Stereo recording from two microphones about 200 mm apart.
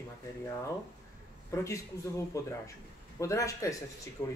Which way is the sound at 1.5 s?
15° left (ahead or behind).